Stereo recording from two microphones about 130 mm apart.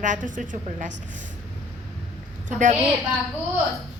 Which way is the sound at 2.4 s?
75° right (ahead or behind).